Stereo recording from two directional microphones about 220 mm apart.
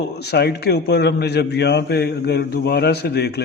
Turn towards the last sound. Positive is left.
turn(degrees=45)  # may be behind; listen again after turning